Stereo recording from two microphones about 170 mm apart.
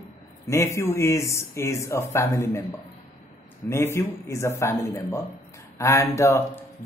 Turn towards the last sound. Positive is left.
turn(degrees=15)  # may be behind; listen again after turning